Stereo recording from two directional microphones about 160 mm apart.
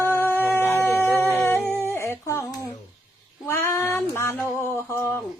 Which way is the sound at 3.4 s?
15° left (ahead or behind).